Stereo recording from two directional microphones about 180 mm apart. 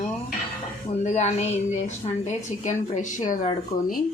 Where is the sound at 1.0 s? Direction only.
40° left (ahead or behind).